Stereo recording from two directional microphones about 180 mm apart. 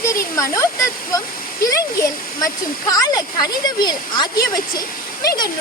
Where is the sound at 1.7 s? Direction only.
15° left (ahead or behind).